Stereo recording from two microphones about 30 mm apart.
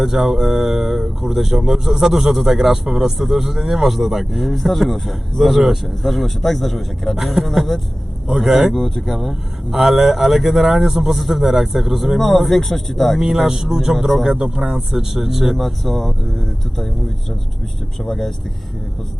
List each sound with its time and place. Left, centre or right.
0.0 s speech: centre
8.7 s speech: centre
9.6 s speech: centre
12.4 s speech: centre
13.1 s speech: centre
15.5 s speech: centre
18.0 s speech: centre